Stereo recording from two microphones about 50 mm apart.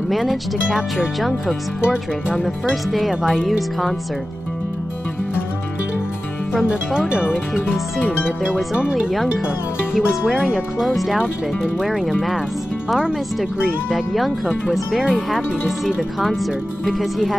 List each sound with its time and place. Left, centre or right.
0.1 s speech: centre
0.7 s speech: centre
2.4 s speech: centre
6.5 s speech: centre
10.4 s speech: centre
12.1 s speech: centre
13.9 s speech: centre
14.9 s speech: centre
15.3 s speech: centre